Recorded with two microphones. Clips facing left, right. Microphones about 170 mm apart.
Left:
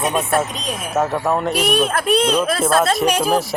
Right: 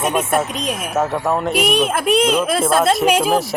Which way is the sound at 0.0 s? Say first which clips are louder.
Right 1 dB; 5° right (ahead or behind).